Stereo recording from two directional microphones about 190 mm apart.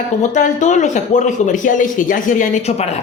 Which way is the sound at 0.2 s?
40° left (ahead or behind).